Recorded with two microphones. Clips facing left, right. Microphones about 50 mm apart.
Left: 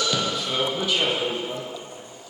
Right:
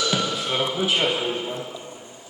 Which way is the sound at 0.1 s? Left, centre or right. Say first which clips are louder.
Right 1 dB; right.